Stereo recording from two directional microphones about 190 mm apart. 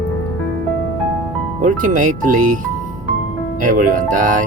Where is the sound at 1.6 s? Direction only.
45° right (ahead or behind).